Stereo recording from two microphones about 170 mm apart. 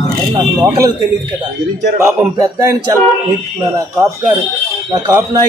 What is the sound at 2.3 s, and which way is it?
Speech, 20° right (ahead or behind).